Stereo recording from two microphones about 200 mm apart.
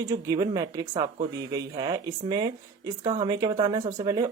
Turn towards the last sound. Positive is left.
turn(degrees=-20)  # may be behind; listen again after turning